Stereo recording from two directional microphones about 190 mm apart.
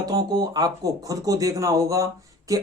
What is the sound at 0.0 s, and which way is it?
Speech, 20° right (ahead or behind).